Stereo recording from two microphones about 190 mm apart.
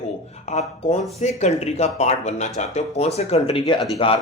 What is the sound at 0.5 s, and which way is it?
Speech, 35° left (ahead or behind).